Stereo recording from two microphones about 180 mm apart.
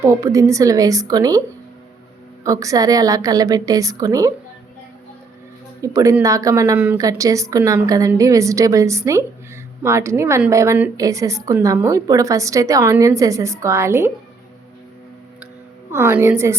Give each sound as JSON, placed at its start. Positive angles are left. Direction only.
{"t": 0.0, "sound": "a woman's voice", "side_deg": -20}
{"t": 2.4, "sound": "a woman's voice", "side_deg": -20}
{"t": 5.8, "sound": "a woman's voice", "side_deg": -15}
{"t": 15.9, "sound": "a woman's voice", "side_deg": -10}